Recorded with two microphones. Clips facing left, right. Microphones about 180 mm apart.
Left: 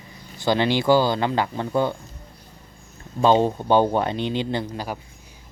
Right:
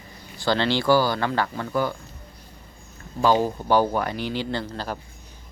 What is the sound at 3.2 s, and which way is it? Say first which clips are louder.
Speech: left 3 dB; 25° left (ahead or behind).